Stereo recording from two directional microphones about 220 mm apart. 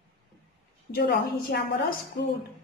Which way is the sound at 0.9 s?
45° left (ahead or behind).